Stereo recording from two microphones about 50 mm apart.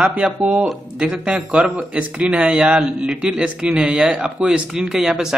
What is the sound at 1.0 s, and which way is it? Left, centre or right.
A man's voice, centre.